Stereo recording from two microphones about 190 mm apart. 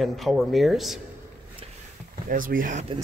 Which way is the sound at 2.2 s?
45° right (ahead or behind).